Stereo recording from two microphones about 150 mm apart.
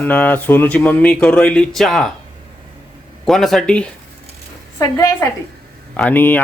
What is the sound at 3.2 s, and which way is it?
Speech, centre (ahead or behind).